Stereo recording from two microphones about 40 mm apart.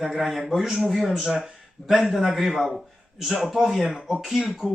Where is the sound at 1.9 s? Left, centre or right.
Centre.